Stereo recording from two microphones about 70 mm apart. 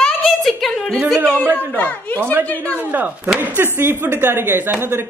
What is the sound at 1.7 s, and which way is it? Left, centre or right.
Speech, centre.